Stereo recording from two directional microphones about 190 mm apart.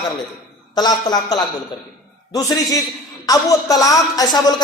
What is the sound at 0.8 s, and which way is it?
A woman's voice, 20° left (ahead or behind).